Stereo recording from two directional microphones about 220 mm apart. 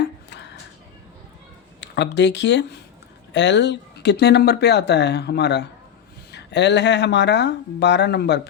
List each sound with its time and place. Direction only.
1.8 s speech: 50° left (ahead or behind)